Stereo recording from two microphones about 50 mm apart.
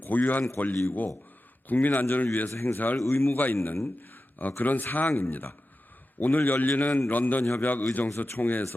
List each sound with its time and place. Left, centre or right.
0.0 s a man's voice: left
3.1 s speech: left
3.3 s speech: left